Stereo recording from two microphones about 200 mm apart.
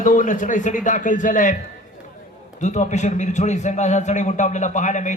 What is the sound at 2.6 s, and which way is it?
A man's voice, 35° left (ahead or behind).